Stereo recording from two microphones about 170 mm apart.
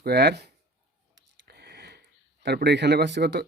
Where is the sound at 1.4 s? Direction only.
70° right (ahead or behind).